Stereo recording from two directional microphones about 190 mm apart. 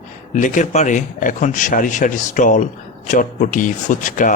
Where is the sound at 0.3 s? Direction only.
40° left (ahead or behind).